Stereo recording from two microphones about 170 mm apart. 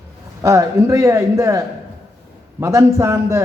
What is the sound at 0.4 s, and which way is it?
A man's voice, 15° right (ahead or behind).